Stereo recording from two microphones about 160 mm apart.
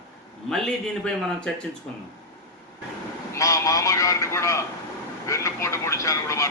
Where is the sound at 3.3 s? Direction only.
20° left (ahead or behind).